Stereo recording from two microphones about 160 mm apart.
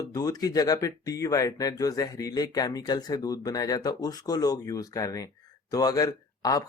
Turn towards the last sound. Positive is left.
turn(degrees=20)  # may be behind; listen again after turning